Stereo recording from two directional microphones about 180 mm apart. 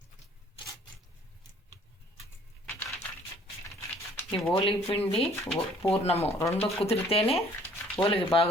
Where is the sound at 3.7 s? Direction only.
15° left (ahead or behind).